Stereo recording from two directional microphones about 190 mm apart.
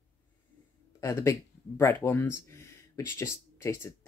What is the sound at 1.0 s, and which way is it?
Speech, 15° left (ahead or behind).